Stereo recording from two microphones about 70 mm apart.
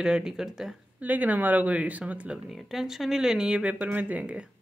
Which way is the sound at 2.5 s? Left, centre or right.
Centre.